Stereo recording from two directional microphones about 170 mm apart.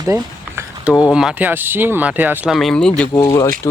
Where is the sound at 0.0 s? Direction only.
20° right (ahead or behind).